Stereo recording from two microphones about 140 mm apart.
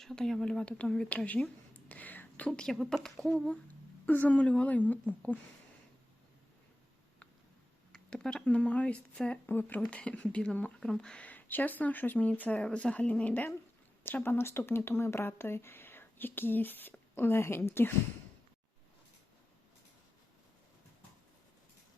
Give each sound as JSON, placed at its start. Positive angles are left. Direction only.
{"t": 0.0, "sound": "a woman's voice", "side_deg": 5}
{"t": 7.9, "sound": "speech", "side_deg": 5}